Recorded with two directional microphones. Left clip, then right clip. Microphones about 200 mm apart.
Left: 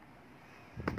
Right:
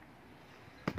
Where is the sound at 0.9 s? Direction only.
25° right (ahead or behind).